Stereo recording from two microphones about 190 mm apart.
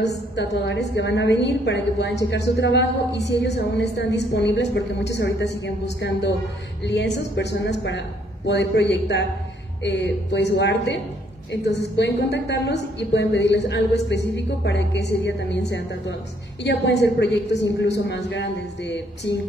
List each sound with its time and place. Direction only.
0.0 s a woman's voice: 65° left (ahead or behind)